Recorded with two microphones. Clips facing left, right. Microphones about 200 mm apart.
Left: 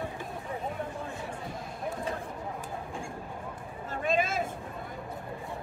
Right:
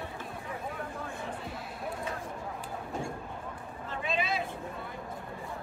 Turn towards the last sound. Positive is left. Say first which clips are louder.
# left 4 dB
turn(degrees=45)  # may be behind; listen again after turning